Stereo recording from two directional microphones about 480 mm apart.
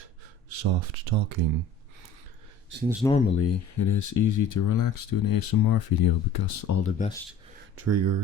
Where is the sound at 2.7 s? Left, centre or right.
Right.